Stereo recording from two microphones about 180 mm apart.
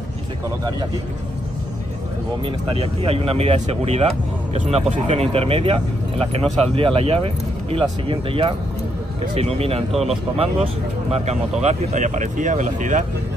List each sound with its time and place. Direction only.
2.4 s speech: 30° right (ahead or behind)